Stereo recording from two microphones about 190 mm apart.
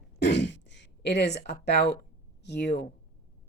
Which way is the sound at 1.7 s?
60° left (ahead or behind).